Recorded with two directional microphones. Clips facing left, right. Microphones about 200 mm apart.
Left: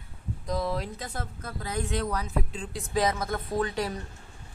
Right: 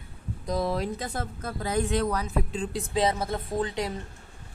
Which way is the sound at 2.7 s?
25° right (ahead or behind).